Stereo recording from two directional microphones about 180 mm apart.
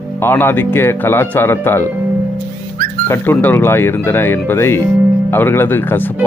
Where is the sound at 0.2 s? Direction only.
10° left (ahead or behind).